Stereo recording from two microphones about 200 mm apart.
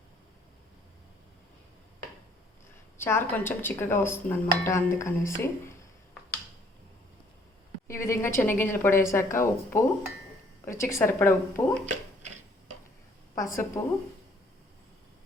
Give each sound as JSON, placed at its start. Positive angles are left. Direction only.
{"t": 3.0, "sound": "speech", "side_deg": 10}
{"t": 7.9, "sound": "speech", "side_deg": 15}
{"t": 13.3, "sound": "speech", "side_deg": 15}